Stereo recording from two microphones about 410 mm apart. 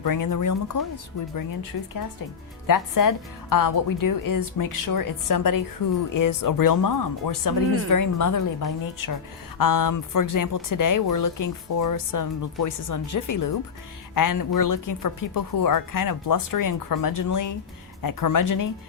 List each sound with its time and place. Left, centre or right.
0.0 s speech: left
2.6 s speech: left